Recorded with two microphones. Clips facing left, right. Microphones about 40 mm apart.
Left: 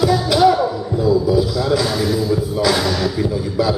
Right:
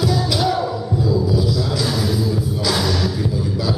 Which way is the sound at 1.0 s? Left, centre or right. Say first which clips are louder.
Left 5 dB; left.